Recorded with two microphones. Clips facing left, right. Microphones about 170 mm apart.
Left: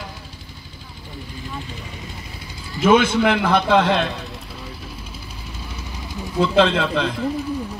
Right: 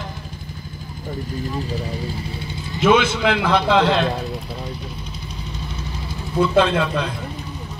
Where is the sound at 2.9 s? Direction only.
50° left (ahead or behind).